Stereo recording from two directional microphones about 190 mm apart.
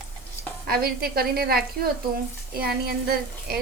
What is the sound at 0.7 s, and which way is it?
A woman's voice, 55° right (ahead or behind).